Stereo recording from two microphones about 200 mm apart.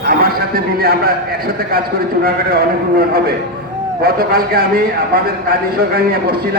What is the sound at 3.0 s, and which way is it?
A man's voice, 50° right (ahead or behind).